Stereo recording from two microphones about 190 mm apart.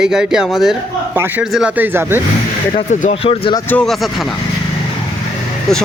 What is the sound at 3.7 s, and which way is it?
Speech, 5° left (ahead or behind).